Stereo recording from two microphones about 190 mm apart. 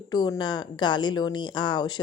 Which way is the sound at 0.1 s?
20° left (ahead or behind).